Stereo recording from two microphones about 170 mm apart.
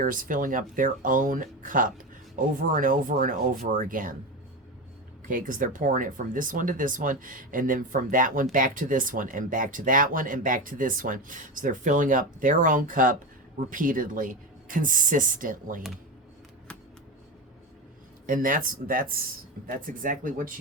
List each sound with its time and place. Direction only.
0.0 s speech: 55° right (ahead or behind)
5.3 s speech: 50° right (ahead or behind)
18.3 s speech: 50° right (ahead or behind)